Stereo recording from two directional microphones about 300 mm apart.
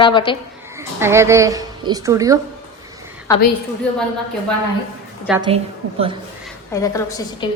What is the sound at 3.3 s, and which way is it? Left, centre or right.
Speech, centre.